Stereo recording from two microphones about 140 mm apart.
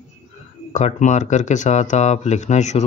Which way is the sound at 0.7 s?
55° left (ahead or behind).